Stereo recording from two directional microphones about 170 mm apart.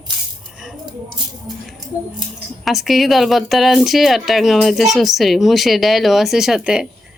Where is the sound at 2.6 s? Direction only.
Centre (ahead or behind).